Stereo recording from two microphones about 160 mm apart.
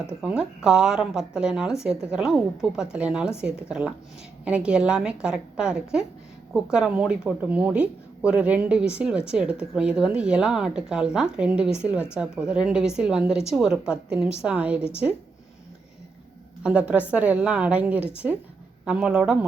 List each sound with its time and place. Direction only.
0.1 s speech: 5° right (ahead or behind)
16.6 s speech: 5° right (ahead or behind)